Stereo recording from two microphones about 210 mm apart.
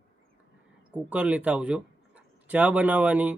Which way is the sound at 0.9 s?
5° right (ahead or behind).